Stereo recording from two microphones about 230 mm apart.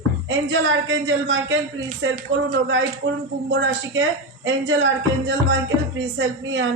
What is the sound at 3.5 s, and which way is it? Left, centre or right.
A woman's voice, right.